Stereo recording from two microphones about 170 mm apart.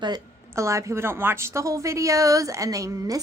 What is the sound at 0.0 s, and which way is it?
A woman's voice, 20° right (ahead or behind).